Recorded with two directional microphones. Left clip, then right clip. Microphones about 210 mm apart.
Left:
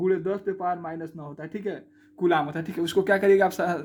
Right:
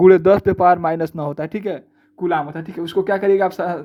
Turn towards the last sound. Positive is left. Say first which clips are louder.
# right 4 dB
turn(degrees=-15)  # may be behind; listen again after turning